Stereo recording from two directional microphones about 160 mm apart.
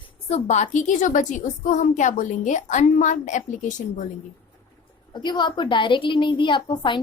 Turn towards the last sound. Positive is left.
turn(degrees=30)  # may be behind; listen again after turning